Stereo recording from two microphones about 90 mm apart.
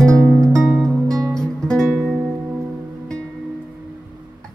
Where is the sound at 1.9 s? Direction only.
5° right (ahead or behind).